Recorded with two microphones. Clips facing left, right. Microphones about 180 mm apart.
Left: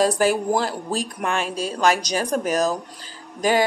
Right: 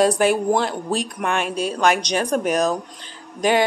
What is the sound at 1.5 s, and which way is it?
Speech, 60° right (ahead or behind).